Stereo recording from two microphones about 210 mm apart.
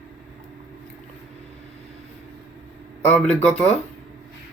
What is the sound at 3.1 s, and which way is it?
Speech, centre (ahead or behind).